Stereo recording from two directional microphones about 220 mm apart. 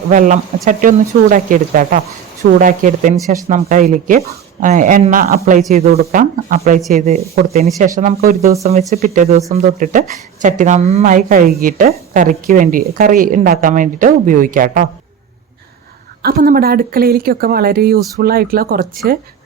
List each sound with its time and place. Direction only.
0.1 s a woman's voice: 35° right (ahead or behind)
16.2 s speech: 40° right (ahead or behind)